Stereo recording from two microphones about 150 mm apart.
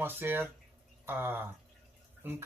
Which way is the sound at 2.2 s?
15° right (ahead or behind).